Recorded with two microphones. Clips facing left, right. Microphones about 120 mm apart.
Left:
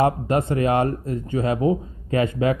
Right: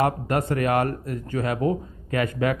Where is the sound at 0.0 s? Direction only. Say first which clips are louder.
Left 3 dB; 25° left (ahead or behind).